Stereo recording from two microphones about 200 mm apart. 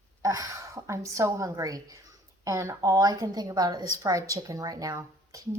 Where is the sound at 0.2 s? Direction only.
15° right (ahead or behind).